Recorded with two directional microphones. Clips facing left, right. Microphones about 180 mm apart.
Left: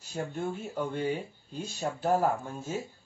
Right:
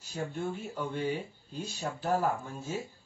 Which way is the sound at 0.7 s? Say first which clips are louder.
Left 3 dB; 45° left (ahead or behind).